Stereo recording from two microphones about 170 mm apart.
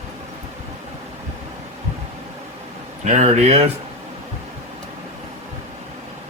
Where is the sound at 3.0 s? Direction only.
45° right (ahead or behind).